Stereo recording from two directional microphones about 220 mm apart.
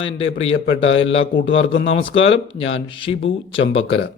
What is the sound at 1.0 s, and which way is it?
Speech, 60° left (ahead or behind).